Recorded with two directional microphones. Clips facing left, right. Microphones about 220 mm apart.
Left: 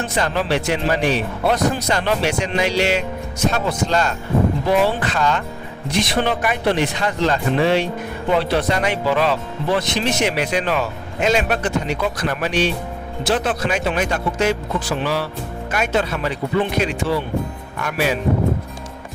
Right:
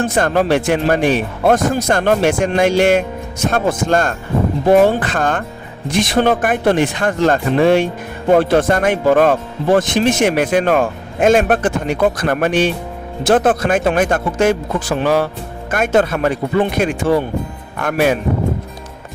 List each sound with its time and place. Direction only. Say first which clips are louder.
0.0 s speech: right 6 dB; 50° right (ahead or behind)